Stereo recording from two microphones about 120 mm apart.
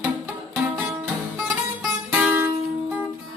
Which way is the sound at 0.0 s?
10° right (ahead or behind).